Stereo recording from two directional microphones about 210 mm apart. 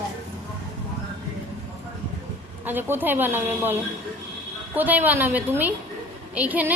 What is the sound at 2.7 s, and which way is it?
Speech, 10° right (ahead or behind).